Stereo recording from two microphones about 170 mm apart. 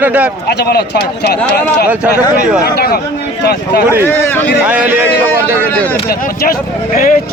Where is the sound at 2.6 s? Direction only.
65° left (ahead or behind).